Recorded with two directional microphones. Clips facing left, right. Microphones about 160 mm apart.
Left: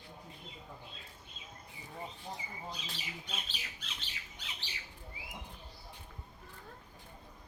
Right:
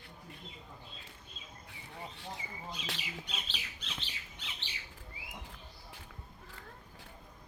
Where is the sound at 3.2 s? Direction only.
45° left (ahead or behind).